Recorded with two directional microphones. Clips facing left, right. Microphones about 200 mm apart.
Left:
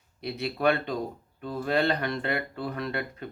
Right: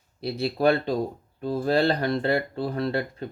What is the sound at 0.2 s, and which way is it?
Speech, 35° right (ahead or behind).